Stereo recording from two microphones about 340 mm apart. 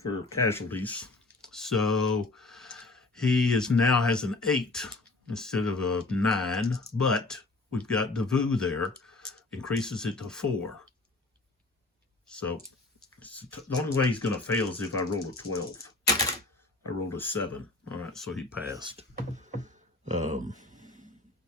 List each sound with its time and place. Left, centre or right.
0.0 s speech: centre
12.3 s speech: centre
17.1 s speech: centre; by 21.1 s right